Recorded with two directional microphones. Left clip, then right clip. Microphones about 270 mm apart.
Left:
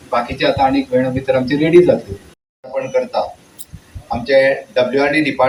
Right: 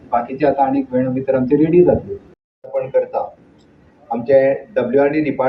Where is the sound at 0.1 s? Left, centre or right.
Left.